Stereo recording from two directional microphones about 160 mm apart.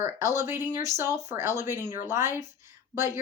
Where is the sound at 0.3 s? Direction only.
15° right (ahead or behind).